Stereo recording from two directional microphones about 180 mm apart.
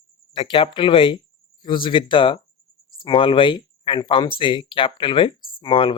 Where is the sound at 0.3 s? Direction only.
30° left (ahead or behind).